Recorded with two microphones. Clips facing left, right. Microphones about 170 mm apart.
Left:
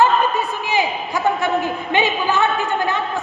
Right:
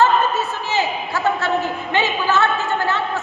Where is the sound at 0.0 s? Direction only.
15° left (ahead or behind).